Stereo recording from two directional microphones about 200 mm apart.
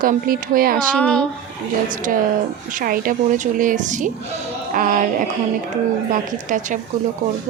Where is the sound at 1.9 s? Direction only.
40° right (ahead or behind).